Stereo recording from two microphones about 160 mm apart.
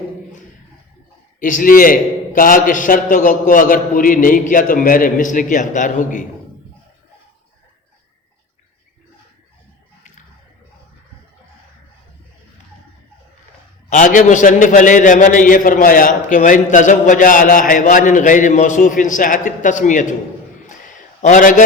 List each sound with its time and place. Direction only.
1.4 s a man's voice: 60° left (ahead or behind)
13.9 s a man's voice: 55° left (ahead or behind)
21.2 s a man's voice: 50° left (ahead or behind)